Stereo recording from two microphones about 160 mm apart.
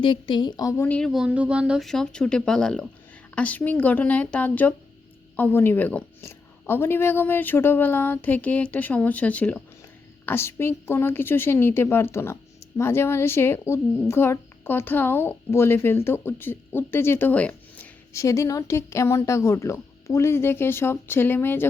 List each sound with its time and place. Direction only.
0.0 s a woman's voice: 30° left (ahead or behind)
0.9 s a woman's voice: 5° left (ahead or behind)